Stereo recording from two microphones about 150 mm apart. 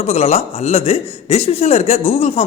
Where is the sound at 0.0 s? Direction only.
45° left (ahead or behind).